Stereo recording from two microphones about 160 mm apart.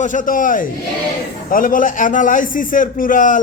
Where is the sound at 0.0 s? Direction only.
55° left (ahead or behind).